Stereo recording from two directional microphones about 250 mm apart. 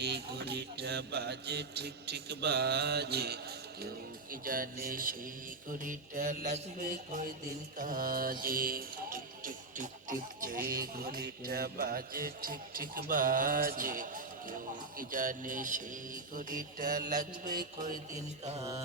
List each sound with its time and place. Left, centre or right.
0.0 s music: right